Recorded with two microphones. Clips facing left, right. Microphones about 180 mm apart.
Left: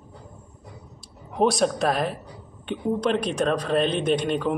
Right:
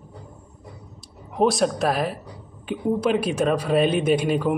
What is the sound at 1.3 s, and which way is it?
Speech, centre (ahead or behind).